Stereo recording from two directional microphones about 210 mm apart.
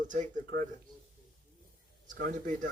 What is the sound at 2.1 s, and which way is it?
Speech, 35° right (ahead or behind).